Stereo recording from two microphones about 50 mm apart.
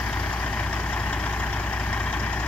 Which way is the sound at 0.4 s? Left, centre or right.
Left.